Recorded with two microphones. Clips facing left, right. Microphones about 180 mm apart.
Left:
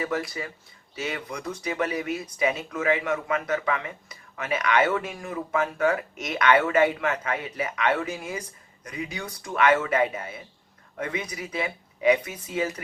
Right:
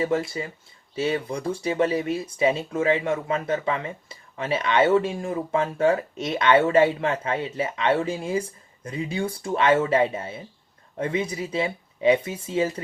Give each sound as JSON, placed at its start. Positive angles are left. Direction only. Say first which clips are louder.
{"t": 0.0, "sound": "speech", "louder": "right 5 dB", "side_deg": -25}